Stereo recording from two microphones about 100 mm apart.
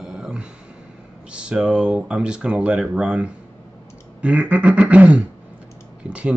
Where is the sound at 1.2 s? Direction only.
10° right (ahead or behind).